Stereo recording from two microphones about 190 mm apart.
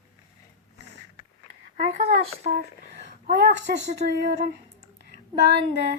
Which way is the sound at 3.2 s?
55° right (ahead or behind).